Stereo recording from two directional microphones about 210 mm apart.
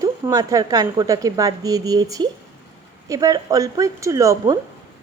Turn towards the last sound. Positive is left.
turn(degrees=-15)  # may be behind; listen again after turning